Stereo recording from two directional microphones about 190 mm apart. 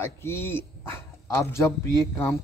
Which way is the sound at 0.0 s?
15° left (ahead or behind).